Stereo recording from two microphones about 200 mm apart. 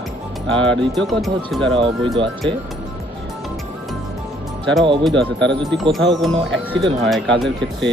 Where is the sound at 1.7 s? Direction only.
25° right (ahead or behind).